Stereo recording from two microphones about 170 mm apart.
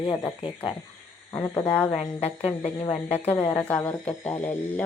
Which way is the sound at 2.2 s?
40° left (ahead or behind).